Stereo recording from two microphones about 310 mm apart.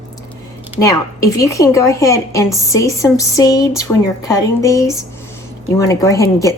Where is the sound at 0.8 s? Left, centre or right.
Centre.